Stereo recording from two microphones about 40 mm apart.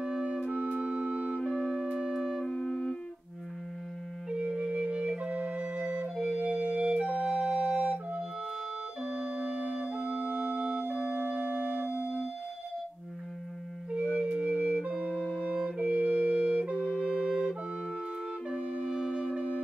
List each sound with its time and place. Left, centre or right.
0.0 s music: centre
0.5 s music: right
0.7 s music: right
1.7 s music: centre
2.4 s music: centre
4.3 s music: right
6.3 s flute: right
9.0 s music: right
11.0 s music: right
11.6 s music: right
13.9 s music: right
15.9 s music: right
17.0 s flute: right
18.9 s music: centre